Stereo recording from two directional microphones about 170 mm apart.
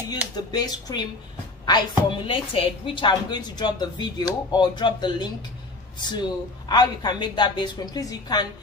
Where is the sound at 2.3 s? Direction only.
30° left (ahead or behind).